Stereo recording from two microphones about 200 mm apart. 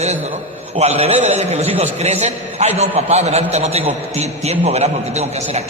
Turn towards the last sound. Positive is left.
turn(degrees=-35)  # may be behind; listen again after turning